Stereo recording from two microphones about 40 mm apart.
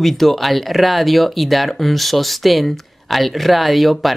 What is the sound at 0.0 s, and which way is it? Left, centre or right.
Speech, centre.